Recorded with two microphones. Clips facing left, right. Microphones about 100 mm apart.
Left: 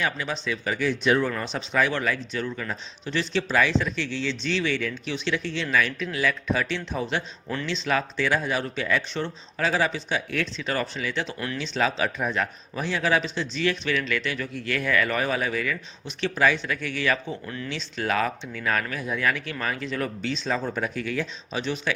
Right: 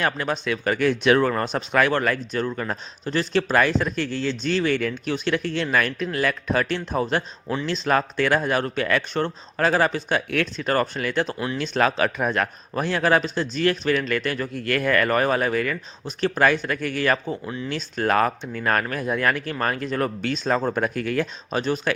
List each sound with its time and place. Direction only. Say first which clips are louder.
0.0 s speech: right 4 dB; 55° right (ahead or behind)
1.3 s a man's voice: right 5 dB; 50° right (ahead or behind)
17.4 s speech: right 4 dB; 20° right (ahead or behind)
17.7 s a man's voice: right 5 dB; 45° right (ahead or behind)